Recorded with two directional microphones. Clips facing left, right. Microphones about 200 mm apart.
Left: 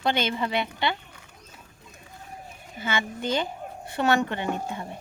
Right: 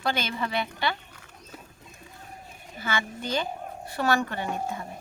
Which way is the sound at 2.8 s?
20° left (ahead or behind).